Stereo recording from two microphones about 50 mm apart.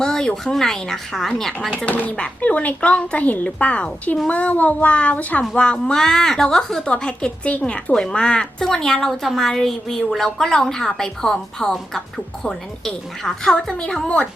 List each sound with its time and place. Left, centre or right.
0.0 s a sound: centre
0.5 s a woman's voice: centre
1.7 s speech: left
5.8 s a woman's voice: centre
6.8 s a woman's voice: left